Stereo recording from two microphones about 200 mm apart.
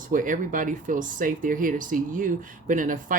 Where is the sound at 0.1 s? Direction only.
40° right (ahead or behind).